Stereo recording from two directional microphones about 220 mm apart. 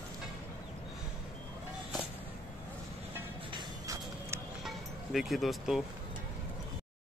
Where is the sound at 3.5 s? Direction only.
15° right (ahead or behind).